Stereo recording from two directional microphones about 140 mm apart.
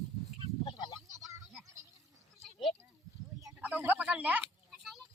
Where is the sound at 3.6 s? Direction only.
10° right (ahead or behind).